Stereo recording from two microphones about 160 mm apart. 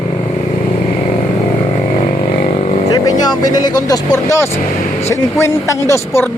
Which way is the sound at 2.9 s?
20° left (ahead or behind).